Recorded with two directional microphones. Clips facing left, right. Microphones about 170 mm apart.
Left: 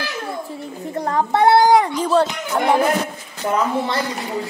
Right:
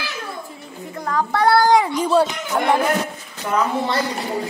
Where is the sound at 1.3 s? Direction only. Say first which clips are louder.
Left 3 dB; 20° left (ahead or behind).